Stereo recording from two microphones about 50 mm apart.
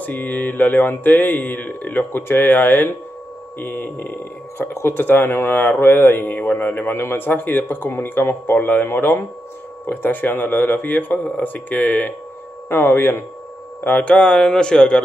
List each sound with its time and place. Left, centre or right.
0.0 s speech: left
6.9 s speech: left
12.6 s speech: left
13.8 s speech: left
14.1 s speech: centre